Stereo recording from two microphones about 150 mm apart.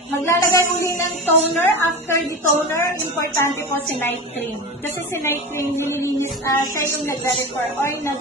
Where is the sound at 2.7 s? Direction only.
20° left (ahead or behind).